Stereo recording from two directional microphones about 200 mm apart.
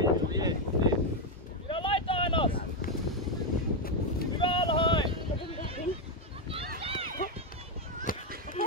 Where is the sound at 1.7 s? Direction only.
25° left (ahead or behind).